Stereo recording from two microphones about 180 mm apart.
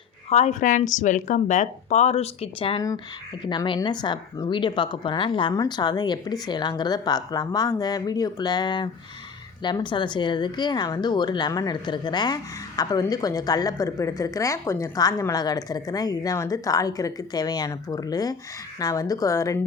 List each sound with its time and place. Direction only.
0.3 s speech: 40° left (ahead or behind); by 19.5 s 20° left (ahead or behind)